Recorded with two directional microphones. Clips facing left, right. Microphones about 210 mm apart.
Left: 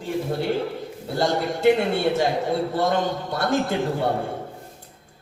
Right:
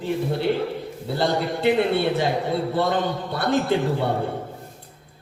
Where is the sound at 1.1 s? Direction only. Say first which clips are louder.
Even; 45° left (ahead or behind).